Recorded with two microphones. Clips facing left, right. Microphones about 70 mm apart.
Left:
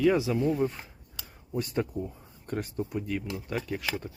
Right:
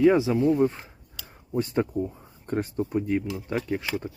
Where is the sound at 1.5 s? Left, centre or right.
Right.